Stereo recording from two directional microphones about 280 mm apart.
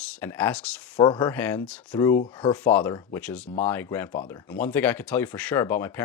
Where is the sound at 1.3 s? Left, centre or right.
Centre.